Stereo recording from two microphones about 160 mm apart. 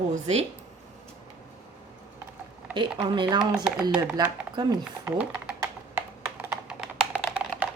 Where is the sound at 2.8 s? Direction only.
30° right (ahead or behind).